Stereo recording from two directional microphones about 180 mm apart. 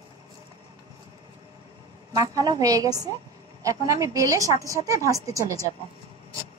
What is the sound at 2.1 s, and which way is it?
A woman's voice, 20° right (ahead or behind).